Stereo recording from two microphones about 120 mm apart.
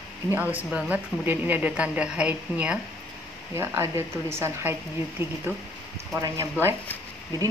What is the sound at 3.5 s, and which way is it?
Speech, 25° right (ahead or behind).